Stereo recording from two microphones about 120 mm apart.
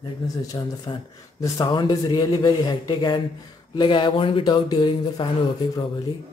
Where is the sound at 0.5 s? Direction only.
30° left (ahead or behind).